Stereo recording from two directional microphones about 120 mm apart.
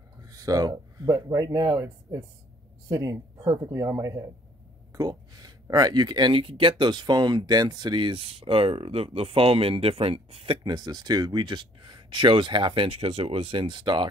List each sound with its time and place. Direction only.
0.2 s speech: 30° right (ahead or behind); by 10.6 s 50° right (ahead or behind)
10.6 s speech: 35° right (ahead or behind)